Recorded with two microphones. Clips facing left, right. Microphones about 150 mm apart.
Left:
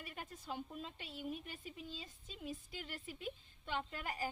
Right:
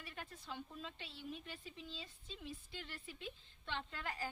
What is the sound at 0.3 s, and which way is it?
Speech, 40° left (ahead or behind).